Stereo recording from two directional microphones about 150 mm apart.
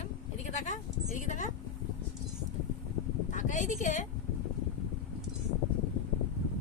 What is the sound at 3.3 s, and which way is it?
Speech, 55° left (ahead or behind).